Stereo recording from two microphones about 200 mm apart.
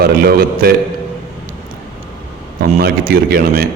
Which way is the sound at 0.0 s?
50° right (ahead or behind).